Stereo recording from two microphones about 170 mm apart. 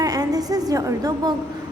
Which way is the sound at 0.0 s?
20° right (ahead or behind).